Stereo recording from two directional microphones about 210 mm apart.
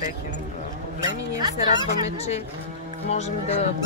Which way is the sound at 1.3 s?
20° right (ahead or behind).